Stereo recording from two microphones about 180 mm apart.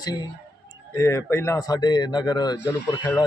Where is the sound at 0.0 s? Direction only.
20° left (ahead or behind).